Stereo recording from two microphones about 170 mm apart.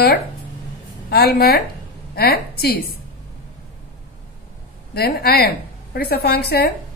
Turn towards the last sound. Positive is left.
turn(degrees=65)  # may be behind; listen again after turning